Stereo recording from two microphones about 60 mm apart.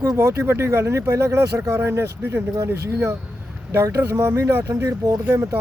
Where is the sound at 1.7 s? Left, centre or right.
Right.